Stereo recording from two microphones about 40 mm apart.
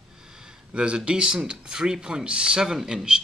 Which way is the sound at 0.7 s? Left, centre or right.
Right.